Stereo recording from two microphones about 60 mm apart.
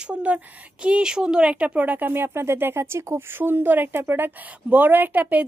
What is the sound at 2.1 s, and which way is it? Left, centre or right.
A woman's voice, right.